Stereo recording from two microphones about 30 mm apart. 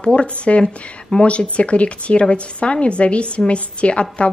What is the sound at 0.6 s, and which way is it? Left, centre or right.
Speech, left.